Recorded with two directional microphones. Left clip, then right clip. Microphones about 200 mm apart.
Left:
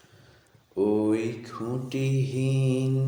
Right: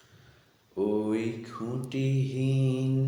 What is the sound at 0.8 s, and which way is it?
Mantra, 30° left (ahead or behind).